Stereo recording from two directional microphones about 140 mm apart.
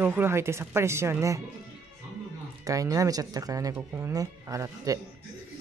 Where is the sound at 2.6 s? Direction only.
25° right (ahead or behind).